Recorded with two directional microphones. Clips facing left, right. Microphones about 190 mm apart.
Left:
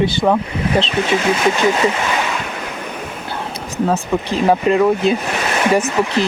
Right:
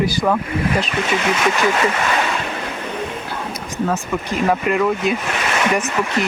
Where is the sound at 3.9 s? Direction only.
30° left (ahead or behind).